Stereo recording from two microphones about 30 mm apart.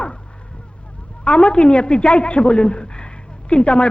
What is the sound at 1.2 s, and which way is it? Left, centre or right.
A man's voice, left.